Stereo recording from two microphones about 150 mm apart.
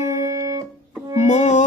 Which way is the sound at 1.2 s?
55° left (ahead or behind).